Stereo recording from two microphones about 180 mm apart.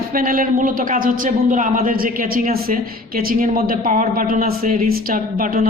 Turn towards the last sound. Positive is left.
turn(degrees=-50)  # may be behind; listen again after turning